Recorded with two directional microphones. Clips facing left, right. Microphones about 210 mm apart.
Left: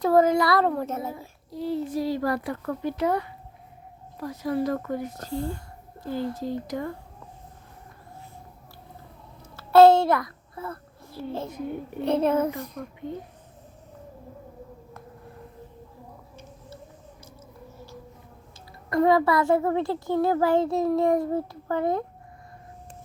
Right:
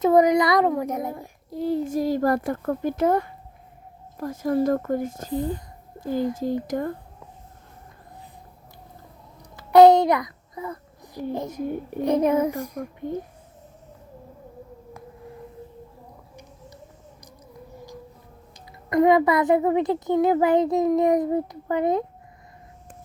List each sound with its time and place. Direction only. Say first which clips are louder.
0.0 s a child's voice: right 2 dB; 20° right (ahead or behind)
1.5 s speech: right 4 dB; 50° right (ahead or behind)
5.3 s a child's voice: right 3 dB; 20° right (ahead or behind)
6.7 s speech: right 4 dB; 50° right (ahead or behind)
9.6 s child singing: right 2 dB; 15° right (ahead or behind)
11.4 s a child's voice: right 3 dB; 40° right (ahead or behind)
12.0 s a child's voice: right 2 dB; 15° right (ahead or behind)
18.9 s a child's voice: right 3 dB; 20° right (ahead or behind)